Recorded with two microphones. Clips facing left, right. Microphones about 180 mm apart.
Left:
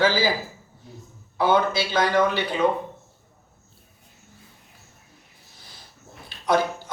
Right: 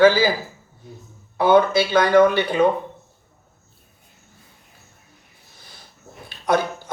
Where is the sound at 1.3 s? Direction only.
55° right (ahead or behind).